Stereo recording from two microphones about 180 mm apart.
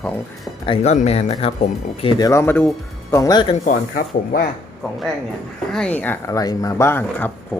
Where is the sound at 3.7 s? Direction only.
50° left (ahead or behind).